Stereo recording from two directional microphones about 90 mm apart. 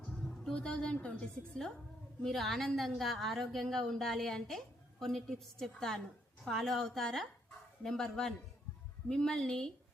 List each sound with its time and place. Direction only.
0.4 s a woman's voice: 10° left (ahead or behind)
2.2 s a woman's voice: centre (ahead or behind)